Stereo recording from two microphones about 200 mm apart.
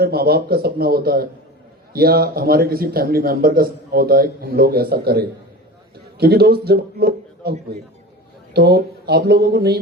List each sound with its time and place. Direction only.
0.0 s a man's voice: 50° right (ahead or behind)
8.5 s a man's voice: 55° right (ahead or behind)